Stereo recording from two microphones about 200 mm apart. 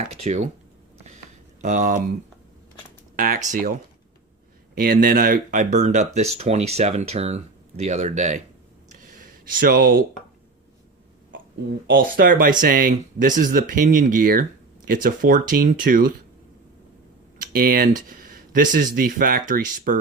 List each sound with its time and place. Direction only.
0.1 s speech: 35° right (ahead or behind)
1.6 s speech: 40° right (ahead or behind)
3.2 s speech: 45° right (ahead or behind)
4.7 s speech: 45° right (ahead or behind)
8.9 s a sound: 45° right (ahead or behind)
11.9 s speech: 50° right (ahead or behind)
17.3 s speech: 45° right (ahead or behind)